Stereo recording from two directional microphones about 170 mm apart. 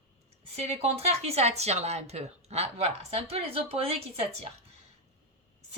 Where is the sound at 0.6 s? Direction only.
35° right (ahead or behind).